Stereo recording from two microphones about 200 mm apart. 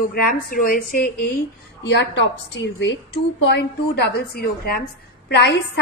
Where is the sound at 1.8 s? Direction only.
60° left (ahead or behind).